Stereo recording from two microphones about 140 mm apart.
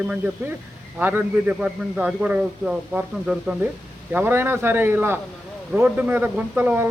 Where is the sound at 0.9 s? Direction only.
10° right (ahead or behind).